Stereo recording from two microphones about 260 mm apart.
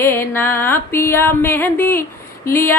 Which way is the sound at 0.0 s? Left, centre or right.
Centre.